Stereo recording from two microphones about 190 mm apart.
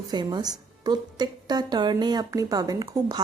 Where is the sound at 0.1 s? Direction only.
20° right (ahead or behind).